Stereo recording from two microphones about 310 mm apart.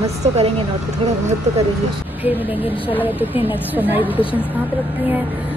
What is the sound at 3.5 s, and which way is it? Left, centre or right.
Speech, centre.